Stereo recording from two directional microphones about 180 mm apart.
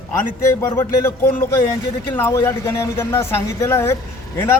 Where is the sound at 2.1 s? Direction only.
15° left (ahead or behind).